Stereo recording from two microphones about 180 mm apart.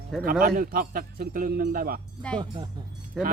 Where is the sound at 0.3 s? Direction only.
55° right (ahead or behind).